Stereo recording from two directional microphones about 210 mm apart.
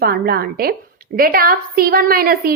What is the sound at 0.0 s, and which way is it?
A woman's voice, 45° right (ahead or behind).